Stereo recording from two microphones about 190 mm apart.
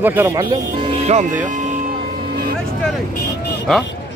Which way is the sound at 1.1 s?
40° right (ahead or behind).